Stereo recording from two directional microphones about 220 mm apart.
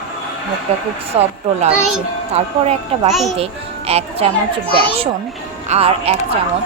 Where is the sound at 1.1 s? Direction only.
25° right (ahead or behind).